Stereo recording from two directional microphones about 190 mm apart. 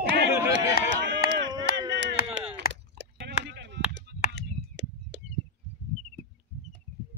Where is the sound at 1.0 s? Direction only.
70° right (ahead or behind).